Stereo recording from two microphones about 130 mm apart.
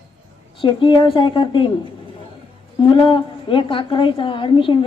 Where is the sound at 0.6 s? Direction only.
40° left (ahead or behind).